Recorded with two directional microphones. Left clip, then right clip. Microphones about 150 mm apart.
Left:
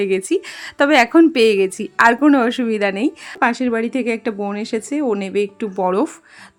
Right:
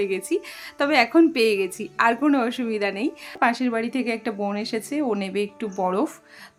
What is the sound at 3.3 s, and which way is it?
Speech, 30° left (ahead or behind).